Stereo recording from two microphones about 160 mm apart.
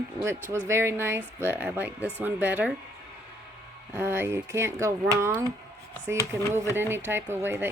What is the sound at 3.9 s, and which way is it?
Speech, 15° right (ahead or behind).